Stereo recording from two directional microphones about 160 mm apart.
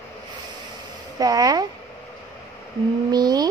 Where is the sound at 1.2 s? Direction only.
25° right (ahead or behind).